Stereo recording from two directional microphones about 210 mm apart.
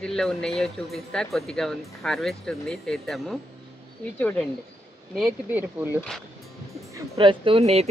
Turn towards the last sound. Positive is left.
turn(degrees=-30)  # may be behind; listen again after turning